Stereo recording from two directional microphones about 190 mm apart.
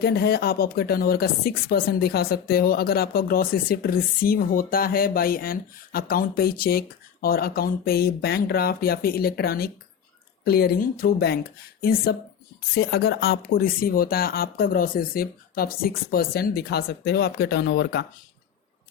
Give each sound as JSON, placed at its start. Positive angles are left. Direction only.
{"t": 0.0, "sound": "speech", "side_deg": 55}